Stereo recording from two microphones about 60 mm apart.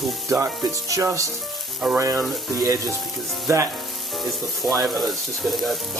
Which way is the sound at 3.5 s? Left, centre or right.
Right.